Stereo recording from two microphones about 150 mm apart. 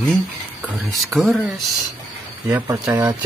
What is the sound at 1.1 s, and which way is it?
Speech, centre (ahead or behind).